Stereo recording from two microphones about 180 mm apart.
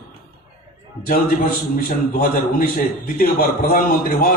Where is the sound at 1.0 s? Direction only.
55° left (ahead or behind).